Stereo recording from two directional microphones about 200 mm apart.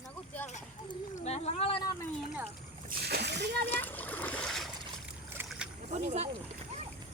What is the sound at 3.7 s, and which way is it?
Splash, 10° left (ahead or behind).